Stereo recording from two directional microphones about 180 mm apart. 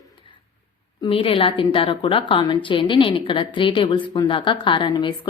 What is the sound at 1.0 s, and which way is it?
A woman's voice, 30° left (ahead or behind).